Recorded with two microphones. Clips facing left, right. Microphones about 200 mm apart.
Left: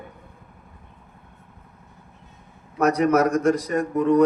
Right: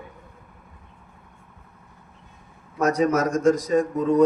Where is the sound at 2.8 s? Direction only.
65° left (ahead or behind).